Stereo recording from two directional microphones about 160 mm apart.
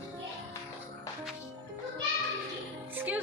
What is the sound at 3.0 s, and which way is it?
Music, 10° right (ahead or behind).